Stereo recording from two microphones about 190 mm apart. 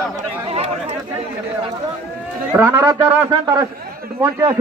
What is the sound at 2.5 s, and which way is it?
A man's voice, 15° right (ahead or behind).